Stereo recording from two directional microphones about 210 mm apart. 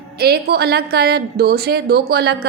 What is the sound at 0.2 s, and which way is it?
A woman's voice, 50° right (ahead or behind).